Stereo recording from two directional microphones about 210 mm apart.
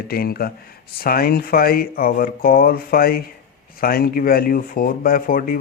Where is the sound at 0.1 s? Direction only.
45° left (ahead or behind).